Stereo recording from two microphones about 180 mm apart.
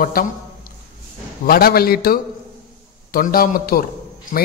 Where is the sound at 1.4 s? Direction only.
55° left (ahead or behind).